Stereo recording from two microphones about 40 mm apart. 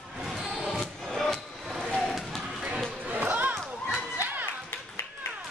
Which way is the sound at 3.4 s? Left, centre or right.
Right.